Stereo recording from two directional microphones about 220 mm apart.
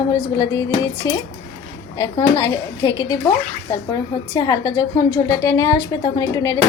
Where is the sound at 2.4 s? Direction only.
15° left (ahead or behind).